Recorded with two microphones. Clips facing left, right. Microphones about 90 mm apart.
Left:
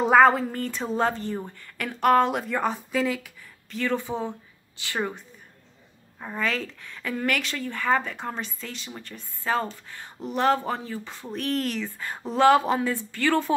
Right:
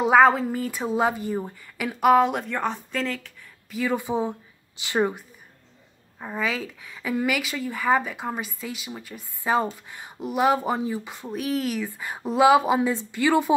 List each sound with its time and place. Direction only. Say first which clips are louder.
0.0 s a woman's voice: right 1 dB; centre (ahead or behind)
3.7 s a woman's voice: right 2 dB; 10° right (ahead or behind)